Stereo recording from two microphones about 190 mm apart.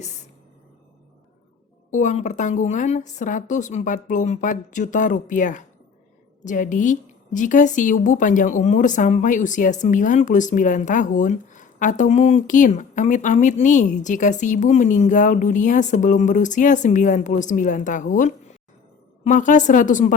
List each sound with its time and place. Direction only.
1.9 s a woman's voice: 40° left (ahead or behind)